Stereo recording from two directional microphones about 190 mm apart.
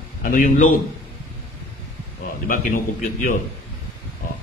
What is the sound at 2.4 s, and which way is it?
Speech, 45° left (ahead or behind).